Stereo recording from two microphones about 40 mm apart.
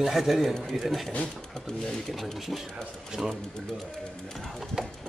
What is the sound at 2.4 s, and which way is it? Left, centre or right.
Speech, centre.